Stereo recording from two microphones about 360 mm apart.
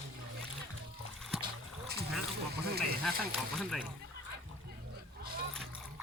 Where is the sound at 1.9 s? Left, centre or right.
Right.